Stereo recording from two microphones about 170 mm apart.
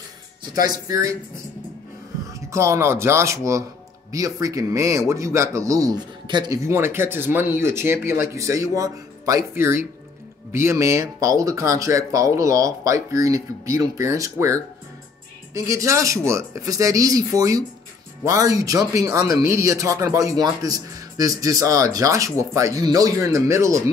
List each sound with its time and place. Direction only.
0.7 s speech: 20° right (ahead or behind)
2.5 s speech: 15° right (ahead or behind)